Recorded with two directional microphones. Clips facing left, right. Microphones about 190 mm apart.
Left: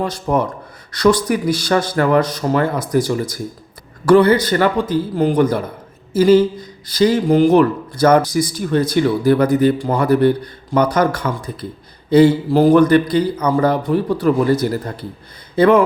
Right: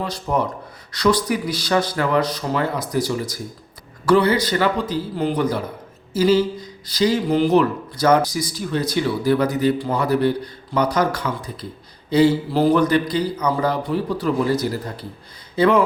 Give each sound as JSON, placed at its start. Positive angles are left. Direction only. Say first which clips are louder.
{"t": 0.0, "sound": "speech", "louder": "left 4 dB", "side_deg": 50}